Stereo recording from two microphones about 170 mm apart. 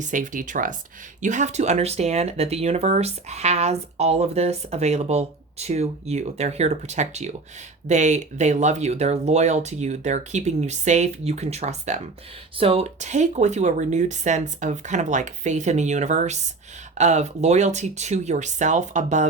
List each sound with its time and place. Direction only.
0.0 s speech: 50° right (ahead or behind)